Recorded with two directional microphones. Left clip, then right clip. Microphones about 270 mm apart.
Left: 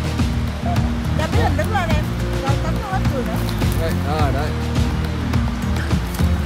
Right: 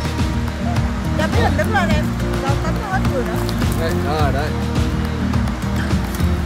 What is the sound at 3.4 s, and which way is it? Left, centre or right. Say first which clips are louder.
Speech: right 2 dB; centre.